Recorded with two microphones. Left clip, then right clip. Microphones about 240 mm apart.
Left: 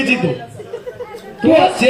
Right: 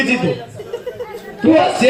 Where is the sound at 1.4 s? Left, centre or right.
Left.